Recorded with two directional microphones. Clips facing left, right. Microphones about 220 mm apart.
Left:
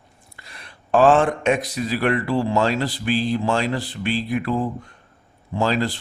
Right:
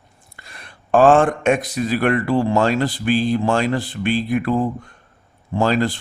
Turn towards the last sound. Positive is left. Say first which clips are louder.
# right 3 dB
turn(degrees=-50)  # may be behind; listen again after turning